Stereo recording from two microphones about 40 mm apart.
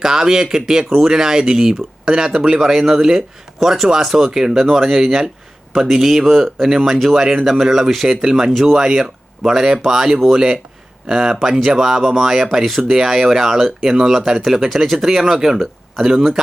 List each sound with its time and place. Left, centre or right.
0.0 s speech: centre